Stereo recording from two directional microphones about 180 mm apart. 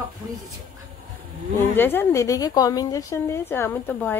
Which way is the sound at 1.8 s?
10° left (ahead or behind).